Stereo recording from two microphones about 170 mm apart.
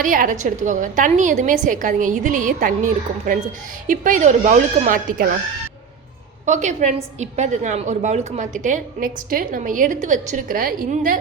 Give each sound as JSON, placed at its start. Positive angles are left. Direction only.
{"t": 0.0, "sound": "a woman's voice", "side_deg": -50}
{"t": 6.4, "sound": "a woman's voice", "side_deg": -45}